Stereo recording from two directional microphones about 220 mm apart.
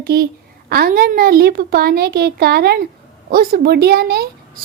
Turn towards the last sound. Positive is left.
turn(degrees=-45)  # may be behind; listen again after turning